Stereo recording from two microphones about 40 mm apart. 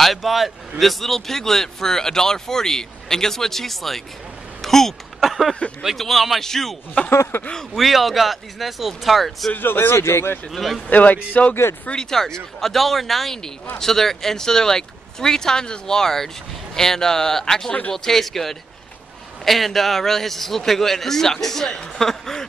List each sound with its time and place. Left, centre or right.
0.0 s speech: centre
7.3 s speech: left
7.7 s speech: centre
9.5 s speech: left
10.5 s speech: centre
10.9 s speech: left
11.9 s speech: centre